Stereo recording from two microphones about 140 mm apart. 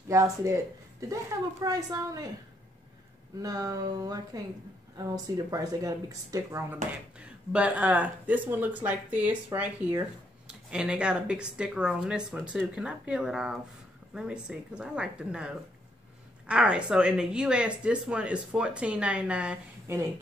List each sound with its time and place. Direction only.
0.1 s speech: 20° right (ahead or behind)
3.4 s speech: 25° right (ahead or behind)
6.7 s speech: 10° right (ahead or behind)